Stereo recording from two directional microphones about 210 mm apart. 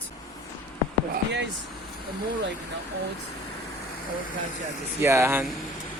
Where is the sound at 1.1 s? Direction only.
55° right (ahead or behind).